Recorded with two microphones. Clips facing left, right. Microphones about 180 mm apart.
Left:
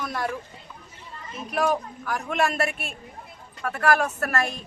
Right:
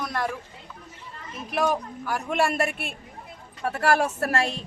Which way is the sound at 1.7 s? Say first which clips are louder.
Left 1 dB; 5° right (ahead or behind).